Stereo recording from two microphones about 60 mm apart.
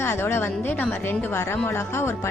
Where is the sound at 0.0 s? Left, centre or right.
Left.